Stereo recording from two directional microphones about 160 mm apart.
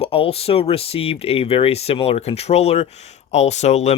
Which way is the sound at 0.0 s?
35° left (ahead or behind).